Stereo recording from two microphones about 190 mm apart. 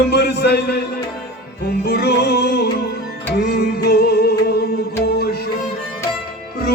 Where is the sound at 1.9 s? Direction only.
60° left (ahead or behind).